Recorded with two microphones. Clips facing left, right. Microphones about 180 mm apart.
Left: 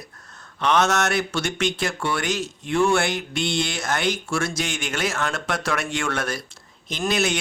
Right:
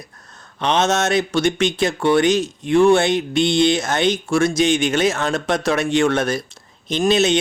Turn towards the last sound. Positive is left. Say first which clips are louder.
# right 7 dB
turn(degrees=-20)  # may be behind; listen again after turning